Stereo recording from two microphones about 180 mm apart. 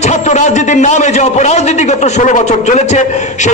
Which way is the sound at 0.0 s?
40° left (ahead or behind).